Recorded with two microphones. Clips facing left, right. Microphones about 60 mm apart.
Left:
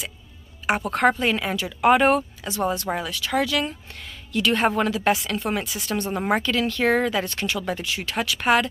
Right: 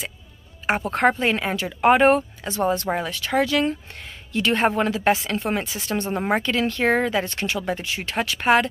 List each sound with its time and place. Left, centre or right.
0.7 s speech: right